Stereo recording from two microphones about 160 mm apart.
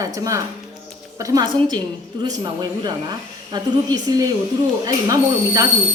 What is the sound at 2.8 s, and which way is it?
Speech, 25° right (ahead or behind).